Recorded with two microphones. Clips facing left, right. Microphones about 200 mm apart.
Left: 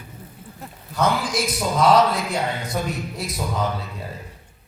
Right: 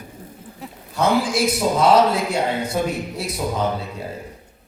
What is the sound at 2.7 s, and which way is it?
Speech, 30° right (ahead or behind).